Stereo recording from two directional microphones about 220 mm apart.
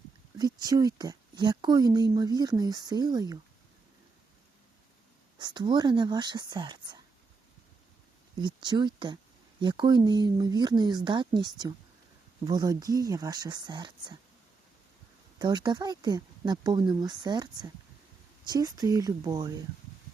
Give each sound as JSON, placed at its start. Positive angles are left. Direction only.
{"t": 0.3, "sound": "speech", "side_deg": -20}
{"t": 5.4, "sound": "speech", "side_deg": -20}
{"t": 8.4, "sound": "speech", "side_deg": -20}
{"t": 15.4, "sound": "speech", "side_deg": -20}